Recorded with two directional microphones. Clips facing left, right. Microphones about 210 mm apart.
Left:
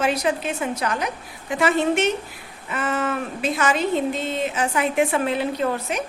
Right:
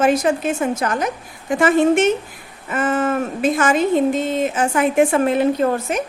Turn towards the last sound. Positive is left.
turn(degrees=-45)  # may be behind; listen again after turning